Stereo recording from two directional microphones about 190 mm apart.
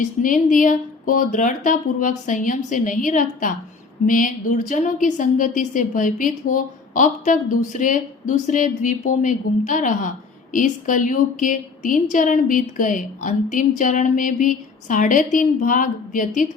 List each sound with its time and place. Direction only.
0.0 s a woman's voice: 45° left (ahead or behind)